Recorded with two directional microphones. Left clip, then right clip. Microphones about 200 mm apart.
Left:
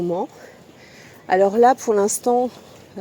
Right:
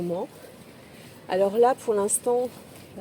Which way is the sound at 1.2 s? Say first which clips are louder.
Left 6 dB; 40° left (ahead or behind).